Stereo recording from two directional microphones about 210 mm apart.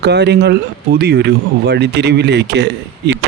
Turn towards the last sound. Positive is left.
turn(degrees=-55)  # may be behind; listen again after turning